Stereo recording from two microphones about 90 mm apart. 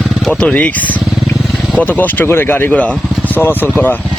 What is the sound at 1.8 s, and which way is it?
Speech, 20° left (ahead or behind).